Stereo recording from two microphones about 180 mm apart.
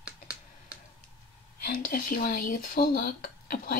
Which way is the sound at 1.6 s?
55° left (ahead or behind).